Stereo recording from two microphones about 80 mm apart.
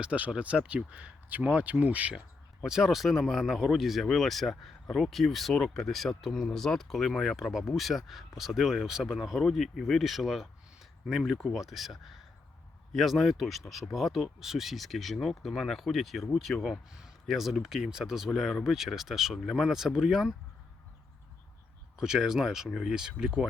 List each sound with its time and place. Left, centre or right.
0.0 s speech: centre
2.6 s speech: centre
21.9 s speech: centre